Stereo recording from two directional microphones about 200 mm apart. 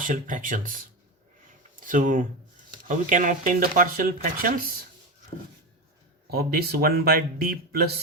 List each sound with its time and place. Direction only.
0.0 s speech: 40° right (ahead or behind)
6.3 s speech: 50° right (ahead or behind)